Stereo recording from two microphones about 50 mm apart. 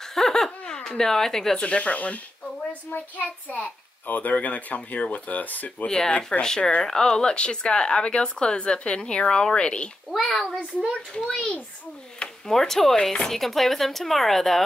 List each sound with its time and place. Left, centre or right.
0.0 s chuckle: centre
1.6 s a child's voice: left
5.9 s speech: centre
10.1 s speech: centre
11.1 s speech: centre